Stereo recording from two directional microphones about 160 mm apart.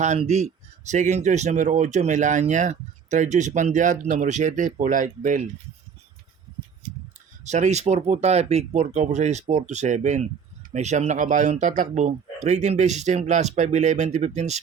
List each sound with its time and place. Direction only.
0.0 s speech: 45° right (ahead or behind)
7.4 s speech: 45° right (ahead or behind)